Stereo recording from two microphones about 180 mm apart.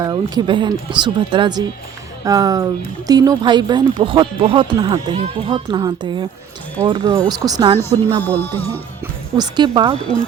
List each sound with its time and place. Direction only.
0.0 s speech: 25° right (ahead or behind)
8.2 s music: 10° left (ahead or behind)
9.3 s speech: 25° right (ahead or behind)